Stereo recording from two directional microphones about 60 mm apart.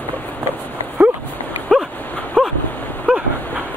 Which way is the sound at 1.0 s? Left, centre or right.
Right.